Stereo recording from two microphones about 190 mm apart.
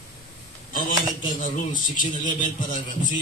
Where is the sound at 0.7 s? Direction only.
45° left (ahead or behind).